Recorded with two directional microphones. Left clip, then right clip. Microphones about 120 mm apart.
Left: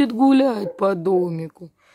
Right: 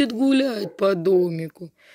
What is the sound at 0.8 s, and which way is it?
Speech, 20° left (ahead or behind).